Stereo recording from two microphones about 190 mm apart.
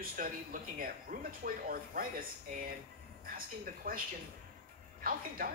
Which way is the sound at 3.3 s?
50° right (ahead or behind).